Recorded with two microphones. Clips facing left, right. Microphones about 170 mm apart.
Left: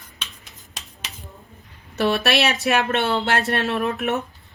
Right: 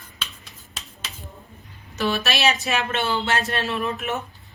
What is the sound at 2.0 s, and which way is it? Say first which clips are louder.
Speech: left 4 dB; 65° left (ahead or behind).